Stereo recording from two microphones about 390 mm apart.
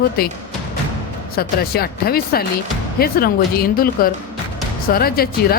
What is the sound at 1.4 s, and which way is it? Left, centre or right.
Speech, left.